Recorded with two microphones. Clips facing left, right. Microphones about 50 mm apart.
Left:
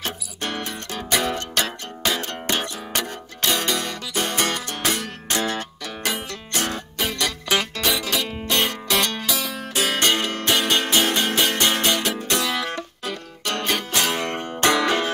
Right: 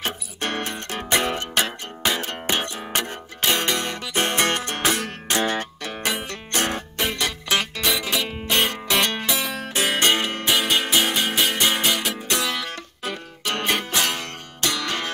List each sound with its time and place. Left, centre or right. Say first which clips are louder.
0.0 s music: right 1 dB; right
1.1 s music: right 1 dB; right
6.5 s music: right 2 dB; right
7.4 s music: left 1 dB; centre
8.0 s music: even; centre
10.5 s music: left 1 dB; centre
13.0 s music: even; centre
13.9 s music: left 1 dB; centre
14.2 s music: left 7 dB; left